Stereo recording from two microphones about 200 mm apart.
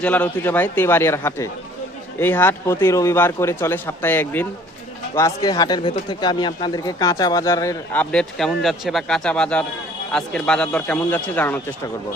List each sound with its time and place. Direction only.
0.0 s speech: 10° left (ahead or behind)
8.1 s a man's voice: 5° left (ahead or behind)